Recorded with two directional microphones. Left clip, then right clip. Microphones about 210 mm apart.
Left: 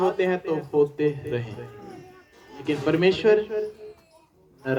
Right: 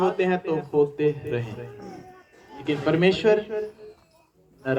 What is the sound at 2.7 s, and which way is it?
Speech, 20° right (ahead or behind).